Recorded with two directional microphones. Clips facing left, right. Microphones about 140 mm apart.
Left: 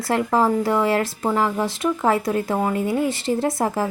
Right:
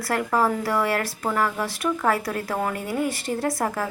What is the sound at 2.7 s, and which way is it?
Speech, centre (ahead or behind).